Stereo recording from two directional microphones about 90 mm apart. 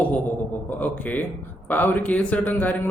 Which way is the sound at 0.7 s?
20° left (ahead or behind).